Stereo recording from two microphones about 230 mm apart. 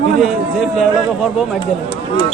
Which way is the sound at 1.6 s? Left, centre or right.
Left.